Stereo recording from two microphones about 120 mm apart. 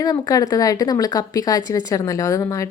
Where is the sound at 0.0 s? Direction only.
30° left (ahead or behind).